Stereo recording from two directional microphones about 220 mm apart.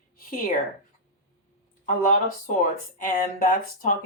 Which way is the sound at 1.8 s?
35° left (ahead or behind).